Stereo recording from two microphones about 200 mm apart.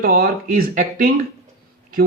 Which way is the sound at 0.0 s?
45° right (ahead or behind).